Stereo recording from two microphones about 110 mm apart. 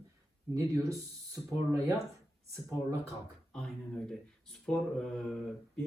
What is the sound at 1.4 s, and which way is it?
Speech, 15° right (ahead or behind).